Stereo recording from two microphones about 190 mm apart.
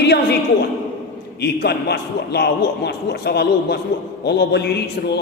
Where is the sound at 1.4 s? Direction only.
60° left (ahead or behind).